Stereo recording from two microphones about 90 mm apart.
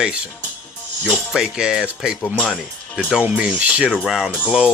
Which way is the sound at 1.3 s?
10° right (ahead or behind).